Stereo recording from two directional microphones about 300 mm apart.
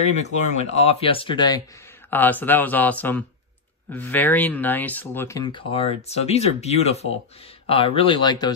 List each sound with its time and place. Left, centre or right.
0.1 s speech: left